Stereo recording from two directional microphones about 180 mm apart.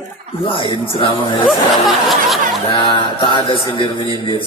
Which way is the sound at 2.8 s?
25° left (ahead or behind).